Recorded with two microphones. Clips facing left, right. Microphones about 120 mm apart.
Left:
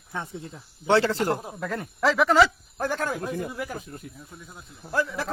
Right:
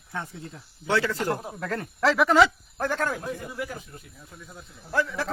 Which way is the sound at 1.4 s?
5° left (ahead or behind).